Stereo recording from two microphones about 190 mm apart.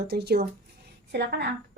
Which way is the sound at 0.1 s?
55° right (ahead or behind).